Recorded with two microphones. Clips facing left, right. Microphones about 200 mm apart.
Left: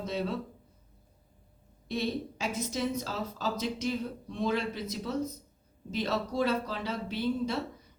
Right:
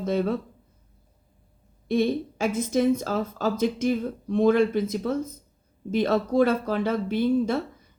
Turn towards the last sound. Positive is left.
turn(degrees=-50)  # may be behind; listen again after turning